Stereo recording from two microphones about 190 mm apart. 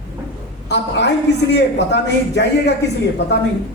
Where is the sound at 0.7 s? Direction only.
65° left (ahead or behind).